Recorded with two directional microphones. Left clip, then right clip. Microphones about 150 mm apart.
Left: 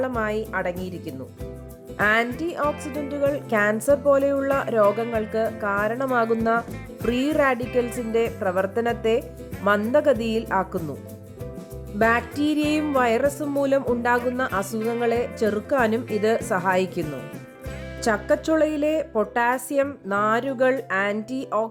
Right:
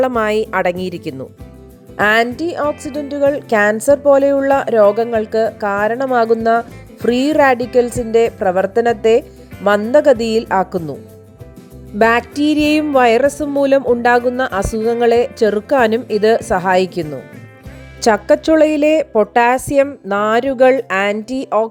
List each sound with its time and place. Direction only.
0.0 s speech: 75° right (ahead or behind)
2.0 s a woman's voice: 45° right (ahead or behind)
11.9 s a woman's voice: 45° right (ahead or behind)